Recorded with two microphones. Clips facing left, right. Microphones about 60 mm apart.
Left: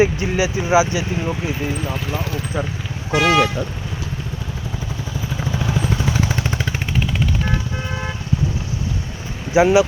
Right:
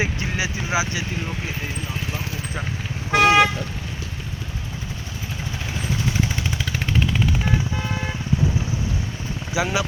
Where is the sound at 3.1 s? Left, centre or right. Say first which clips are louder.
Right 1 dB; right.